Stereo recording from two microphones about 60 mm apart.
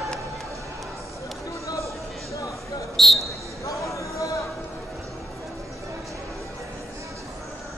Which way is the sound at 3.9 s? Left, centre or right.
Left.